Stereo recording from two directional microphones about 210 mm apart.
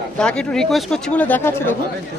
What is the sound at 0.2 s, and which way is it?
A man's voice, 5° left (ahead or behind).